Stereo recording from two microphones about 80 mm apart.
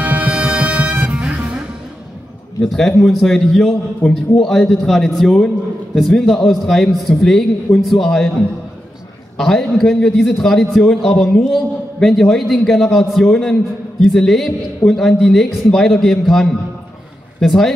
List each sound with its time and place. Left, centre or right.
0.0 s music: right
2.6 s a man's voice: centre
9.4 s a man's voice: centre